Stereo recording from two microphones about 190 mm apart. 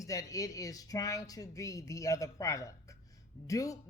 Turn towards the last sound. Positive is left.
turn(degrees=15)  # may be behind; listen again after turning